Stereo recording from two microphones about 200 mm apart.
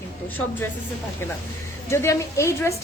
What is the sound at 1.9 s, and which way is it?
Speech, 15° left (ahead or behind).